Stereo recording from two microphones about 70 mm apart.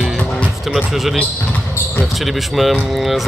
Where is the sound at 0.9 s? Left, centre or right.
Centre.